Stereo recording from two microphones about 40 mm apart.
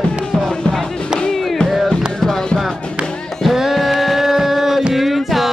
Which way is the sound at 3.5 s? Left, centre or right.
Centre.